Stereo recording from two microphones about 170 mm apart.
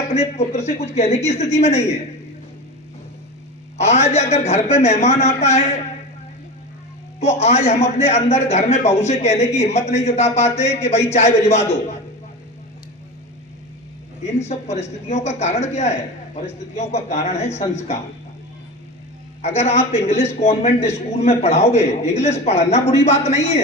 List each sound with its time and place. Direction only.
0.1 s a man's voice: 40° left (ahead or behind)
3.8 s a man's voice: 40° left (ahead or behind)
7.2 s a man's voice: 40° left (ahead or behind)
14.3 s a man's voice: 40° left (ahead or behind)
19.4 s a man's voice: 40° left (ahead or behind)